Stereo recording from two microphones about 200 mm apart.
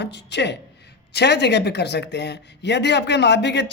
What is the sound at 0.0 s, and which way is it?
A woman's voice, 60° left (ahead or behind).